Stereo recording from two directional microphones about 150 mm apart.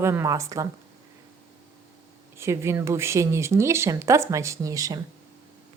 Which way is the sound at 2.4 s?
15° right (ahead or behind).